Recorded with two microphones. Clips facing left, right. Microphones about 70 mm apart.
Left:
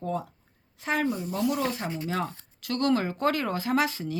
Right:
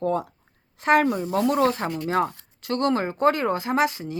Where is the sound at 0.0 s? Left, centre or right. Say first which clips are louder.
Right 7 dB; right.